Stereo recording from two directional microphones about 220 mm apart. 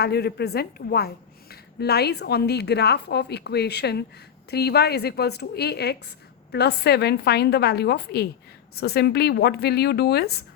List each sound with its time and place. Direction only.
0.0 s a woman's voice: 45° left (ahead or behind)